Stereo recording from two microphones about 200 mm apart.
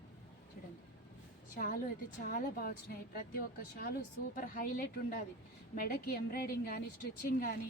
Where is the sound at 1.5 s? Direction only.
45° left (ahead or behind).